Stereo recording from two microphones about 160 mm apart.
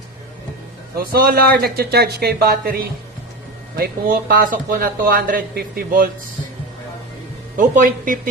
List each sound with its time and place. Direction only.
0.9 s speech: 65° right (ahead or behind)
7.5 s speech: 55° right (ahead or behind)